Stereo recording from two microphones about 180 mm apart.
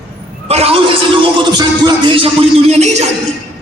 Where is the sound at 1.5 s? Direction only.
25° right (ahead or behind).